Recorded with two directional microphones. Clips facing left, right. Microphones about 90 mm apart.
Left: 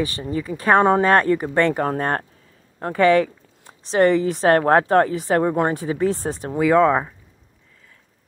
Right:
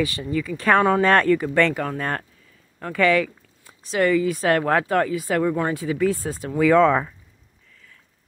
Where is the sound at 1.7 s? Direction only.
35° left (ahead or behind); by 7.1 s 20° left (ahead or behind).